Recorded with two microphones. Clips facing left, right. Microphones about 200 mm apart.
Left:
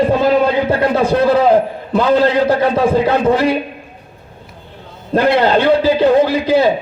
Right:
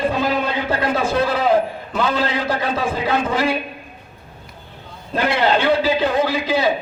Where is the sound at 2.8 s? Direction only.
40° left (ahead or behind).